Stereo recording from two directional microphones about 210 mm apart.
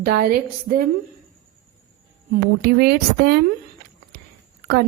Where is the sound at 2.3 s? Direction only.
50° right (ahead or behind).